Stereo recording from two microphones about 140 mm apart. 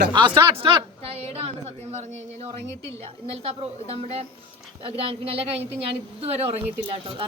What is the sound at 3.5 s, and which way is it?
A woman's voice, 45° right (ahead or behind).